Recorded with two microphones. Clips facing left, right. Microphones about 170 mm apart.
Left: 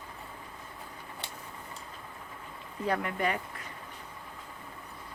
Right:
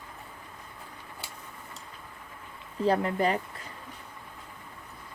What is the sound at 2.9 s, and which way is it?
Speech, 30° right (ahead or behind).